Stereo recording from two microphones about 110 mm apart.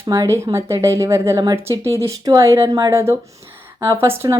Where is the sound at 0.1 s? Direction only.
25° right (ahead or behind).